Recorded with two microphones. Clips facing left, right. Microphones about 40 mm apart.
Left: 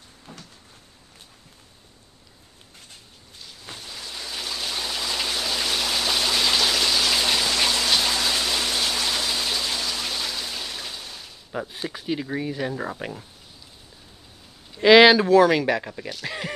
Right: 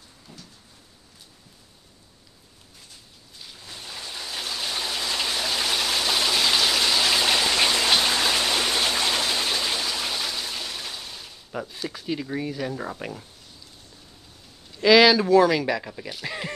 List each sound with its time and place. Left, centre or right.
3.8 s a sound: centre
7.8 s rain: right
8.2 s a sound: right; by 11.6 s centre
11.6 s speech: left
14.8 s speech: left
16.1 s speech: centre